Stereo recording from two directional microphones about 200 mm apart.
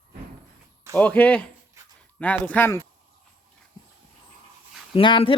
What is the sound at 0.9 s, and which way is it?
Speech, 10° left (ahead or behind).